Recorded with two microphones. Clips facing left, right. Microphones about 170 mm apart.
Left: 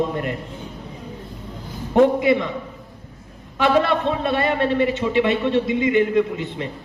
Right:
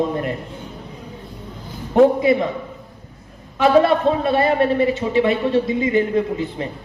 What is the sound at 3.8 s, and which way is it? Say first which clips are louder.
A man's voice: right 4 dB; 35° right (ahead or behind).